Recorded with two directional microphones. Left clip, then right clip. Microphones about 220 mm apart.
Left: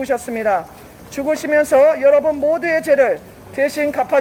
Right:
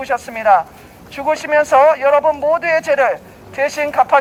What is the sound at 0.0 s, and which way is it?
Speech, 35° right (ahead or behind).